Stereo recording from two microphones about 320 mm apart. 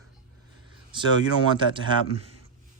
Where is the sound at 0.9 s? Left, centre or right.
Centre.